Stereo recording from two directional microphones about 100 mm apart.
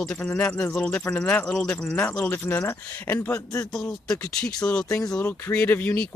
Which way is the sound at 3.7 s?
5° left (ahead or behind).